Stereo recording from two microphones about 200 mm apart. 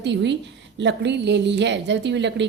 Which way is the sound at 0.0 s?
60° right (ahead or behind).